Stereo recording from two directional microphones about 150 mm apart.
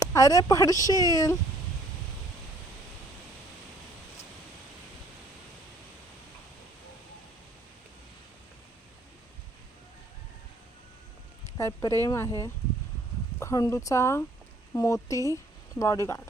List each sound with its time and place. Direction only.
0.0 s speech: 20° left (ahead or behind)
11.5 s speech: 25° left (ahead or behind)